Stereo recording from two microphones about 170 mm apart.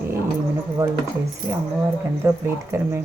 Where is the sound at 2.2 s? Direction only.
15° right (ahead or behind).